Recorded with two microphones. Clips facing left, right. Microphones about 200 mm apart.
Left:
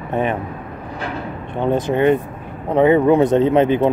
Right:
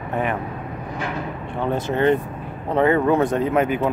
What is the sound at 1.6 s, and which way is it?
Speech, 15° left (ahead or behind).